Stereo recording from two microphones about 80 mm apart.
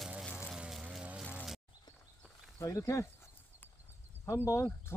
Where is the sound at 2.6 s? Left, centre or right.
Left.